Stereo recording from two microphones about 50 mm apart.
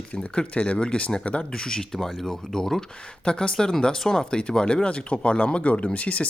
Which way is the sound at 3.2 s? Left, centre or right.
Centre.